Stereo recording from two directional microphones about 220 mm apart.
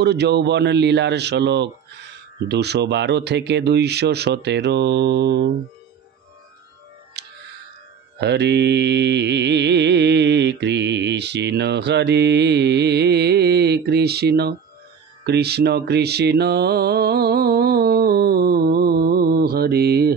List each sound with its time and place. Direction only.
0.0 s mantra: 50° right (ahead or behind)
7.2 s music: 50° right (ahead or behind)
8.2 s mantra: 50° right (ahead or behind)